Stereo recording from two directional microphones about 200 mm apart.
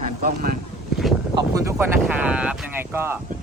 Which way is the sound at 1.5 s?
15° right (ahead or behind).